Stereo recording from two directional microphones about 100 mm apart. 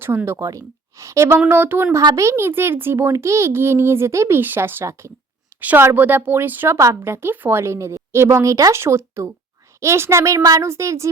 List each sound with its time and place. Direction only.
0.0 s a woman's voice: 25° right (ahead or behind)
2.0 s a woman's voice: 35° right (ahead or behind)